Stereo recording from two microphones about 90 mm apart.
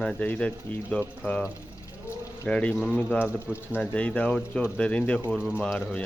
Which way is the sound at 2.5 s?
15° left (ahead or behind).